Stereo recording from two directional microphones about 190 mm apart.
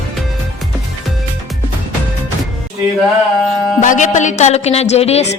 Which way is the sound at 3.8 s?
40° left (ahead or behind).